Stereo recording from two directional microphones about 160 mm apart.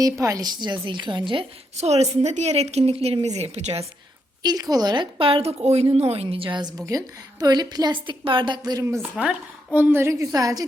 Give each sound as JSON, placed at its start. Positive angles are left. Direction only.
{"t": 0.0, "sound": "a woman's voice", "side_deg": -20}
{"t": 4.4, "sound": "a woman's voice", "side_deg": -25}
{"t": 9.0, "sound": "a woman's voice", "side_deg": -5}